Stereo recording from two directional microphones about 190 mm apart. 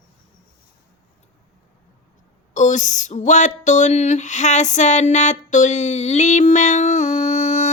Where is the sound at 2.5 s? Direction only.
40° left (ahead or behind).